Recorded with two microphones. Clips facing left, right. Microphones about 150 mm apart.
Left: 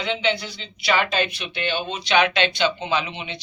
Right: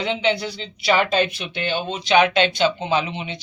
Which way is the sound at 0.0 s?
35° right (ahead or behind).